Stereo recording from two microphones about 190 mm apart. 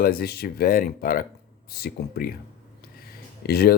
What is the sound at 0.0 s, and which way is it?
Speech, 50° left (ahead or behind).